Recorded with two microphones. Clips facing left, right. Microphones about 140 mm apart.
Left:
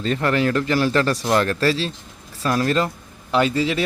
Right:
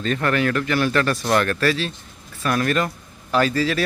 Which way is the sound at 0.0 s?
25° left (ahead or behind).